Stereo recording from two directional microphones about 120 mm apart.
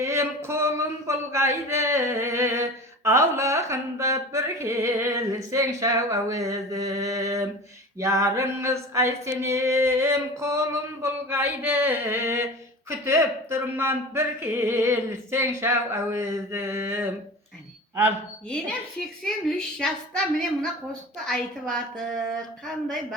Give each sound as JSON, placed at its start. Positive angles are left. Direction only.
{"t": 0.0, "sound": "speech", "side_deg": -25}
{"t": 7.9, "sound": "a sound", "side_deg": -25}
{"t": 19.2, "sound": "a woman's voice", "side_deg": 5}